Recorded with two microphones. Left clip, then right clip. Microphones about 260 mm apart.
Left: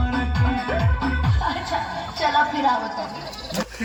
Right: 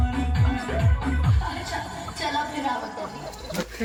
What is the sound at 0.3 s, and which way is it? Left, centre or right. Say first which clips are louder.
Music: left 5 dB; left.